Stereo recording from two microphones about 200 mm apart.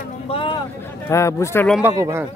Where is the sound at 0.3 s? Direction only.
25° left (ahead or behind).